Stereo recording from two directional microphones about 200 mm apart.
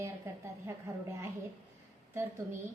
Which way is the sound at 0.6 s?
15° right (ahead or behind).